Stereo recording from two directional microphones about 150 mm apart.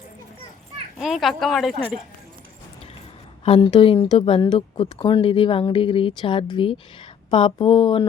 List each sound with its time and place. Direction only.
0.9 s speech: centre (ahead or behind)
3.4 s speech: 35° left (ahead or behind)